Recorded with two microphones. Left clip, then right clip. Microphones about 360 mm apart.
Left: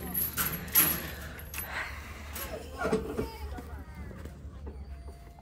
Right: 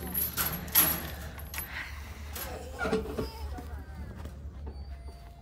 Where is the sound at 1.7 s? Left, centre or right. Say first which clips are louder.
Left 5 dB; centre.